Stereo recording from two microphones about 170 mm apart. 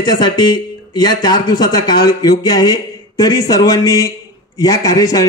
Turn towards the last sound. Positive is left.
turn(degrees=20)  # may be behind; listen again after turning